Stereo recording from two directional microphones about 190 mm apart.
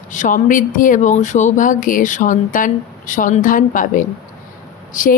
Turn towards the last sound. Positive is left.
turn(degrees=45)  # may be behind; listen again after turning